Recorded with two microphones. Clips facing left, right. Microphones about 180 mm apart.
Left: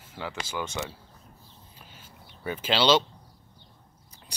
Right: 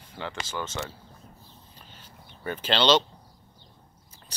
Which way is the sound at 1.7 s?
10° left (ahead or behind).